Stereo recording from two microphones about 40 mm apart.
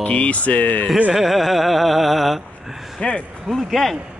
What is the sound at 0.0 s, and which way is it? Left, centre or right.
Speech, left.